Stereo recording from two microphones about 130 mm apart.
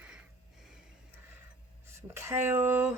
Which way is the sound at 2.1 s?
20° right (ahead or behind).